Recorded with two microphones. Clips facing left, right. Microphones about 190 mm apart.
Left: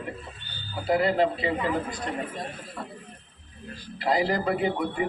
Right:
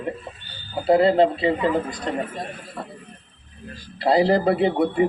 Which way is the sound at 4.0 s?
35° right (ahead or behind).